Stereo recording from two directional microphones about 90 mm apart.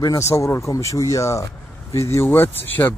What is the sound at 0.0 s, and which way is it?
A man's voice, 35° left (ahead or behind).